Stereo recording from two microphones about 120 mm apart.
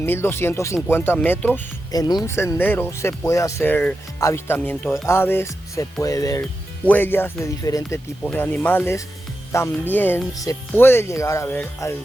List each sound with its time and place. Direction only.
0.0 s speech: 20° left (ahead or behind)
1.9 s speech: 30° left (ahead or behind)
2.2 s speech: 20° left (ahead or behind)
6.8 s speech: 15° left (ahead or behind)
8.2 s speech: 10° left (ahead or behind)
10.3 s speech: 30° left (ahead or behind)